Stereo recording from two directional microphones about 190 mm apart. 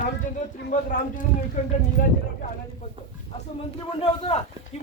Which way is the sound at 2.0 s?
45° left (ahead or behind).